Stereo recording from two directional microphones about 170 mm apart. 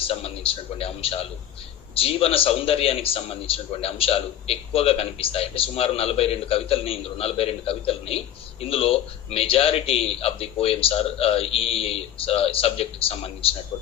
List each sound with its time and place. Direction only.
0.0 s a man's voice: 35° left (ahead or behind)